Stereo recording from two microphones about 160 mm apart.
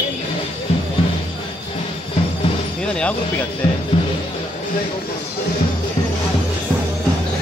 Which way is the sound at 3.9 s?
40° left (ahead or behind).